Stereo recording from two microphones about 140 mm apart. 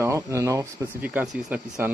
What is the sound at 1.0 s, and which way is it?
Speech, 10° right (ahead or behind).